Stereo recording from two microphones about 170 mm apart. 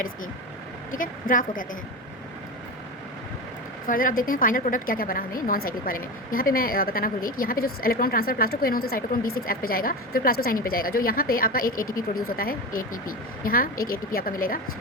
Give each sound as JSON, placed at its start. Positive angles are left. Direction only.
{"t": 0.9, "sound": "a woman's voice", "side_deg": 50}
{"t": 3.8, "sound": "a woman's voice", "side_deg": 55}